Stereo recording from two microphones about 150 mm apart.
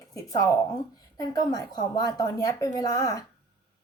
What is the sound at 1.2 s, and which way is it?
A woman's voice, 25° left (ahead or behind).